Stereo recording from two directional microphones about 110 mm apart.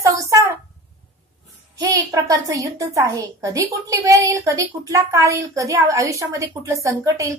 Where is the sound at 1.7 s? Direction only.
30° right (ahead or behind).